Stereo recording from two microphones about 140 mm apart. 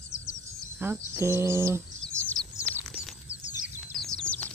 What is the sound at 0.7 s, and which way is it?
Speech, 15° right (ahead or behind).